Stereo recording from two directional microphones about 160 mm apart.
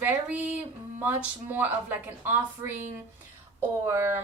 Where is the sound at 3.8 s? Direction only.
15° right (ahead or behind).